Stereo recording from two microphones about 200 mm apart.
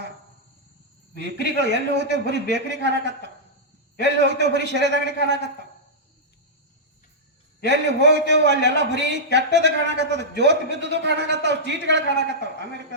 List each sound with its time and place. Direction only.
1.5 s a man's voice: 60° right (ahead or behind)
7.6 s a man's voice: 60° right (ahead or behind)